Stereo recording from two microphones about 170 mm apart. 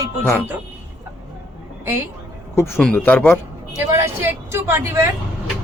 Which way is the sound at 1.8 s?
15° right (ahead or behind).